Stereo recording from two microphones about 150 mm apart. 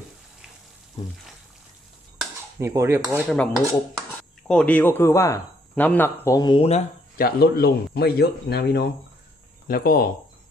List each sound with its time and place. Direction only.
2.6 s speech: 20° right (ahead or behind)
3.2 s cutlery: centre (ahead or behind)
4.5 s a man's voice: 10° left (ahead or behind)
6.5 s speech: 45° left (ahead or behind)
7.2 s a man's voice: 85° left
9.7 s speech: 75° left (ahead or behind)